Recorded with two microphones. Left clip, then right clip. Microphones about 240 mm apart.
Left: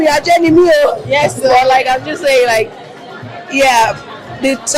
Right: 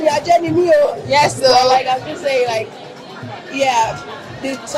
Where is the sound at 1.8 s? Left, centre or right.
Left.